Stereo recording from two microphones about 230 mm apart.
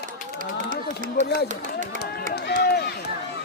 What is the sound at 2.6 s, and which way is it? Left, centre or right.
Run, left.